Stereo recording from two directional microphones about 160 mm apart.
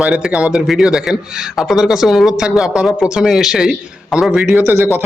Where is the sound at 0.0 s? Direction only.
5° right (ahead or behind).